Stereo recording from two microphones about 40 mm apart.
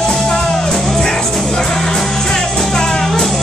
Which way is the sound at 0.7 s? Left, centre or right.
Centre.